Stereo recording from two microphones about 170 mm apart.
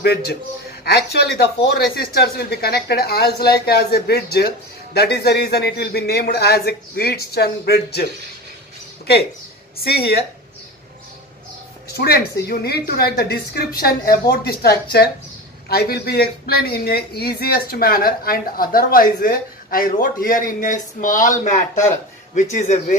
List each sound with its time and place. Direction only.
0.0 s speech: 75° left (ahead or behind)
9.8 s speech: 70° left (ahead or behind)
12.0 s speech: 65° left (ahead or behind); by 22.9 s 45° left (ahead or behind)